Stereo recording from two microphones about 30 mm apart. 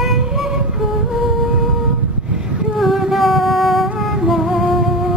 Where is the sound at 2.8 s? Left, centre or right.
Centre.